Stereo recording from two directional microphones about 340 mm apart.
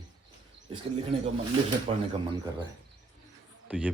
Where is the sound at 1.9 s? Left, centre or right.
Centre.